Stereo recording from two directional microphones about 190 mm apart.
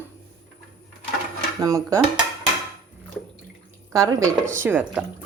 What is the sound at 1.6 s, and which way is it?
Speech, 20° right (ahead or behind).